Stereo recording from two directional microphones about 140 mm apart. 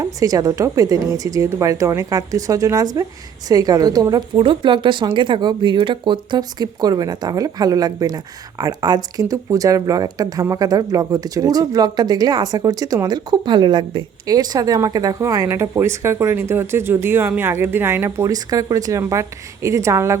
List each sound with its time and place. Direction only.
0.0 s speech: 25° right (ahead or behind)